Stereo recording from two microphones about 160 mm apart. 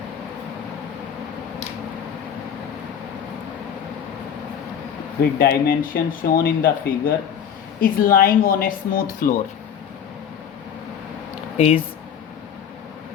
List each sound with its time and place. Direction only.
5.2 s speech: 70° left (ahead or behind)
11.5 s speech: 40° left (ahead or behind)